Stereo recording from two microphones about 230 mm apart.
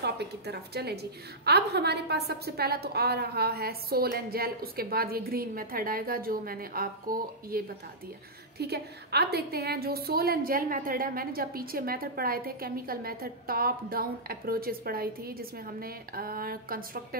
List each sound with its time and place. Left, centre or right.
0.0 s a woman's voice: right